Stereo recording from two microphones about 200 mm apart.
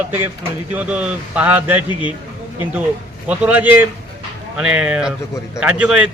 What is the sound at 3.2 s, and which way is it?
Speech, 10° right (ahead or behind).